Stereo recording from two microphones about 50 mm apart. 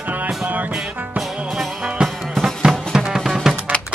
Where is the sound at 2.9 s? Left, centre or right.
Centre.